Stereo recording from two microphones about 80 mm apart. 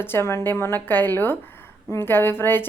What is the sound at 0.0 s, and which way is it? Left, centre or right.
A woman's voice, left.